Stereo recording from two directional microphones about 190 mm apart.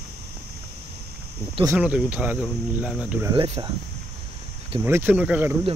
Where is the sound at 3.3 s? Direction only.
25° right (ahead or behind).